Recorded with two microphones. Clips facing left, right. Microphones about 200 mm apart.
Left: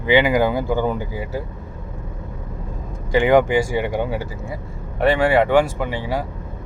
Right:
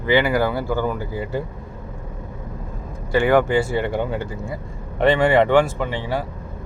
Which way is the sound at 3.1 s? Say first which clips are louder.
Left 2 dB; 15° left (ahead or behind).